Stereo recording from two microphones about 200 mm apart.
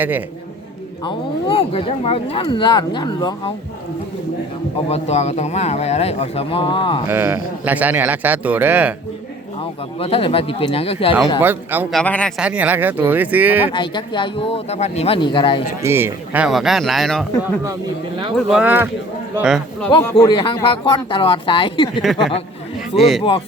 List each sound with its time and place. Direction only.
1.0 s speech: 25° left (ahead or behind)
4.9 s a man's voice: 35° left (ahead or behind)
7.1 s speech: 10° right (ahead or behind)
9.6 s speech: 30° left (ahead or behind)
11.4 s speech: 10° right (ahead or behind)
11.9 s speech: 5° left (ahead or behind)
12.4 s speech: 5° right (ahead or behind)
13.7 s speech: 25° left (ahead or behind)
15.8 s speech: 10° right (ahead or behind)
20.1 s speech: 25° left (ahead or behind)
22.0 s speech: centre (ahead or behind)